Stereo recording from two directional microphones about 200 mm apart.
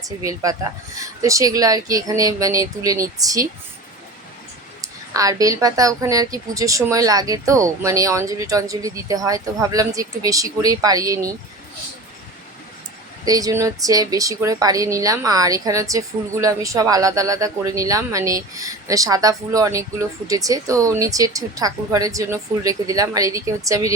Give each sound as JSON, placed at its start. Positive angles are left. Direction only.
{"t": 0.0, "sound": "a woman's voice", "side_deg": -15}
{"t": 4.8, "sound": "a woman's voice", "side_deg": -15}
{"t": 13.2, "sound": "a woman's voice", "side_deg": -20}